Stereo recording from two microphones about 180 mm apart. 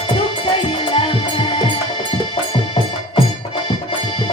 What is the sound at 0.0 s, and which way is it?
Music, 30° left (ahead or behind).